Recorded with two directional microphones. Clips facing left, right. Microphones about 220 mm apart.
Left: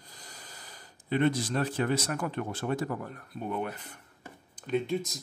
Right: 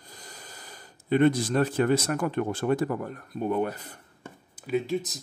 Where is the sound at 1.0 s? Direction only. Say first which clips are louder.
Right 5 dB; 50° right (ahead or behind).